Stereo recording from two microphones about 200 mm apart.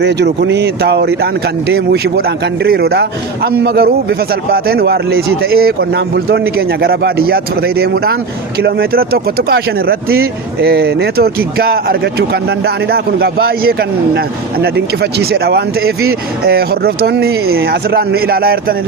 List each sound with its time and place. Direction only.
0.0 s speech: 60° right (ahead or behind)
15.2 s speech: 50° right (ahead or behind)